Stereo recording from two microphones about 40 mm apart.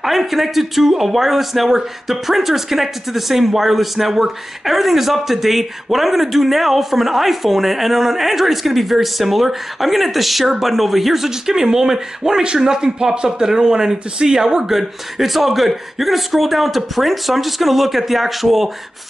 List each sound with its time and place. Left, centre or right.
0.0 s speech: centre
11.2 s speech: centre